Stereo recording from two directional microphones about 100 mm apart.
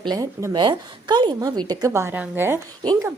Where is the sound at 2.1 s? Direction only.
20° right (ahead or behind).